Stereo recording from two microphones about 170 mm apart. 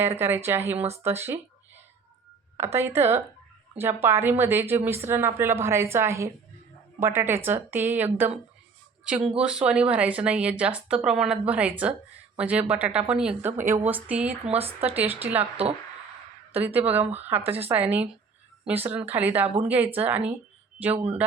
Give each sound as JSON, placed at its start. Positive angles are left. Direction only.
{"t": 0.2, "sound": "speech", "side_deg": -15}
{"t": 1.0, "sound": "a sound", "side_deg": -15}
{"t": 2.7, "sound": "speech", "side_deg": -15}
{"t": 14.5, "sound": "speech", "side_deg": -35}
{"t": 14.9, "sound": "speech", "side_deg": -10}
{"t": 16.6, "sound": "speech", "side_deg": -10}
{"t": 20.9, "sound": "speech", "side_deg": -35}